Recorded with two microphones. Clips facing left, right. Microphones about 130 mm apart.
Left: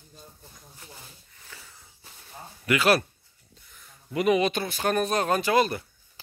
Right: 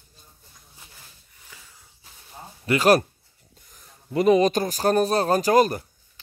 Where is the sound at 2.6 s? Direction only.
40° right (ahead or behind).